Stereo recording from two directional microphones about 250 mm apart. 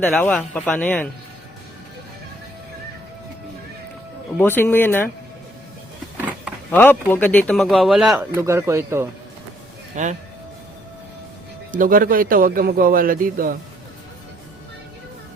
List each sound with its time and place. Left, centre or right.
0.0 s a man's voice: centre
4.4 s speech: centre
6.7 s a man's voice: centre
9.9 s speech: right
11.7 s speech: right